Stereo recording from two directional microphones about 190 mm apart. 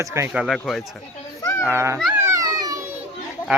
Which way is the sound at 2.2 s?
15° right (ahead or behind).